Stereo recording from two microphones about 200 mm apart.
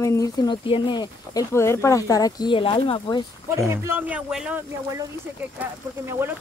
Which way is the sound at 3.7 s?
10° right (ahead or behind).